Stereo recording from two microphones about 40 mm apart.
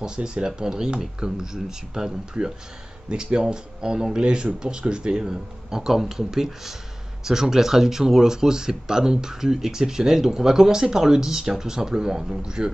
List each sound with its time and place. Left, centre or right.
0.0 s speech: right